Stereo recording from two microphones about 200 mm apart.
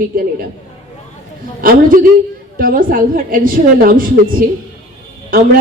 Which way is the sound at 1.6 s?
45° right (ahead or behind).